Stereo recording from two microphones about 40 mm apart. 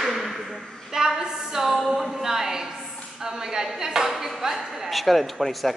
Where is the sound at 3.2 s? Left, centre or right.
Centre.